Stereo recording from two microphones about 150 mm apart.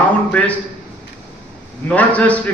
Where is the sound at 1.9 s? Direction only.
10° left (ahead or behind).